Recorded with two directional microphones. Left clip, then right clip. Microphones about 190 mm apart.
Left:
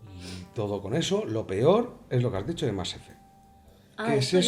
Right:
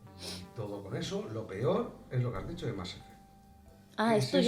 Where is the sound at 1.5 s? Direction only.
50° left (ahead or behind).